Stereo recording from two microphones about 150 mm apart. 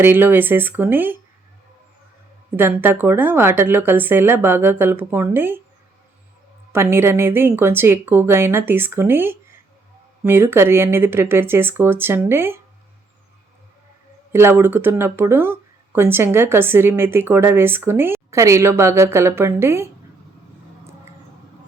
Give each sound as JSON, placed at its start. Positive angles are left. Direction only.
{"t": 0.0, "sound": "speech", "side_deg": -15}
{"t": 2.6, "sound": "speech", "side_deg": -15}
{"t": 6.7, "sound": "speech", "side_deg": -15}
{"t": 14.3, "sound": "speech", "side_deg": -15}